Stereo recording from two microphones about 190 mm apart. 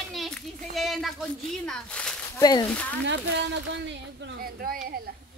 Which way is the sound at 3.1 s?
70° right (ahead or behind).